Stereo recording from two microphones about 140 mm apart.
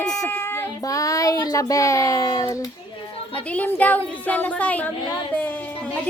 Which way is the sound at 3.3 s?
10° left (ahead or behind).